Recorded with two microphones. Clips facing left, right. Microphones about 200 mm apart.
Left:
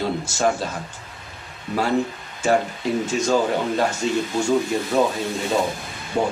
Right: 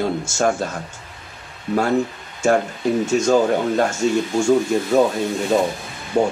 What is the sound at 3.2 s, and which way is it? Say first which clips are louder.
Speech: right 2 dB; 45° right (ahead or behind).